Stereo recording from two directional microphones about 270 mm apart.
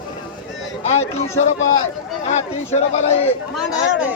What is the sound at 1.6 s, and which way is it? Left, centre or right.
Speech, left.